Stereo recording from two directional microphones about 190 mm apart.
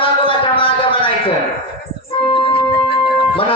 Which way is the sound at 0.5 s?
30° left (ahead or behind).